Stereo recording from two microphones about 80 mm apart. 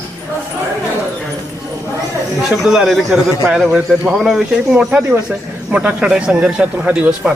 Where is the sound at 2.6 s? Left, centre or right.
Centre.